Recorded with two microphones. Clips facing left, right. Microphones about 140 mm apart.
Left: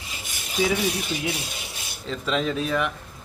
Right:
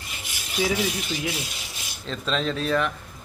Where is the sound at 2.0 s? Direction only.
10° left (ahead or behind).